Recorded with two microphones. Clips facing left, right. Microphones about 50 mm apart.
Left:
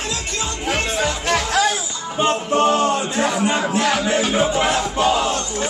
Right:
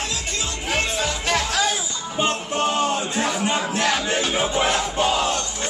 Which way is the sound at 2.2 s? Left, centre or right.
Centre.